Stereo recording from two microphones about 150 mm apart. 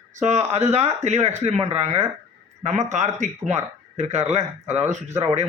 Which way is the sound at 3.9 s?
50° right (ahead or behind).